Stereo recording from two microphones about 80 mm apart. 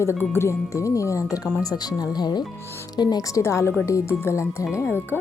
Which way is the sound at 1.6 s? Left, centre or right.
Left.